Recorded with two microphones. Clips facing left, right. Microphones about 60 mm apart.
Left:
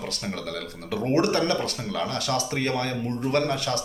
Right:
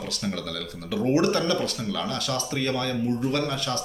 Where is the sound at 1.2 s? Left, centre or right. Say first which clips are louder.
Even; left.